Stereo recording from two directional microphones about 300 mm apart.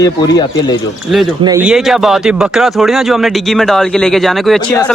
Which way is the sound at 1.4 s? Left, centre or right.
Centre.